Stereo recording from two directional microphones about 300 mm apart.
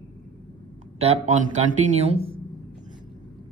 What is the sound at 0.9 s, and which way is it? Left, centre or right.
A man's voice, right.